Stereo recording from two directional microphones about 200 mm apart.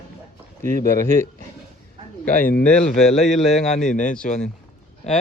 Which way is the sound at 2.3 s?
40° left (ahead or behind).